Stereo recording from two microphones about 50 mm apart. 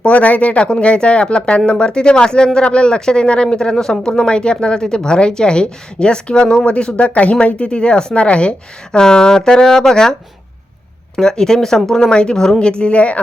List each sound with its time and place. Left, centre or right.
0.0 s speech: left; by 10.2 s centre
11.2 s speech: centre